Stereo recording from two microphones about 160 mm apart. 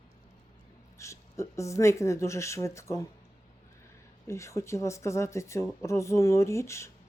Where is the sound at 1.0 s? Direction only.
20° left (ahead or behind).